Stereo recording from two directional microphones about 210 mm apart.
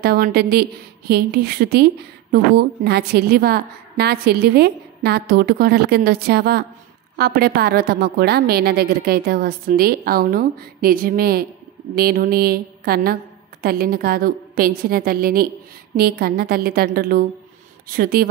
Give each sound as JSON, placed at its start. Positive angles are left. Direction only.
{"t": 0.0, "sound": "a woman's voice", "side_deg": -50}